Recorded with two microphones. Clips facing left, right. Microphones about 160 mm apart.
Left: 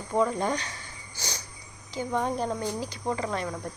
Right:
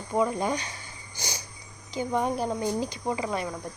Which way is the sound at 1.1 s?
10° right (ahead or behind).